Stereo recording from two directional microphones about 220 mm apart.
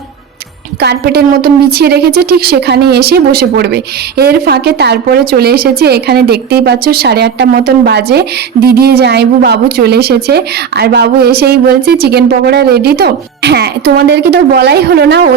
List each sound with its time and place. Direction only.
0.8 s a woman's voice: 45° right (ahead or behind)